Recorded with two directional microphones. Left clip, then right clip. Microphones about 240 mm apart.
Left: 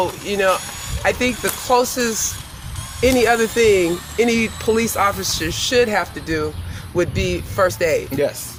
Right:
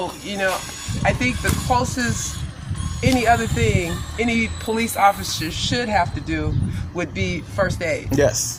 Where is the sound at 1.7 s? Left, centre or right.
Left.